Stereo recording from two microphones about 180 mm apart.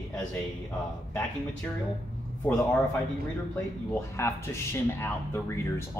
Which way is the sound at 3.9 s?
15° left (ahead or behind).